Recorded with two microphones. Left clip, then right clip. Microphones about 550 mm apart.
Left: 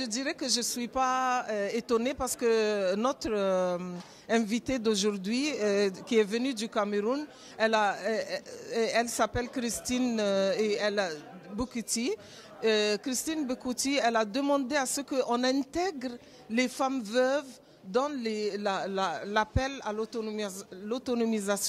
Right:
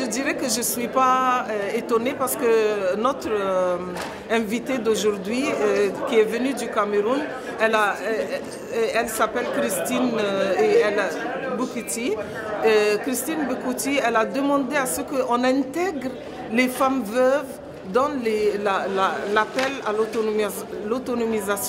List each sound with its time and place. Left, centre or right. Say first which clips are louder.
0.0 s a woman's voice: right 9 dB; left
12.6 s a woman's voice: right 8 dB; left